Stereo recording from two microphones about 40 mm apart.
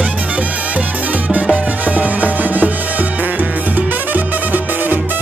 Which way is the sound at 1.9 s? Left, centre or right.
Right.